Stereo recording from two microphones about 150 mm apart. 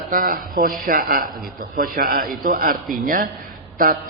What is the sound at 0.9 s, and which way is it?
A man's voice, 85° right.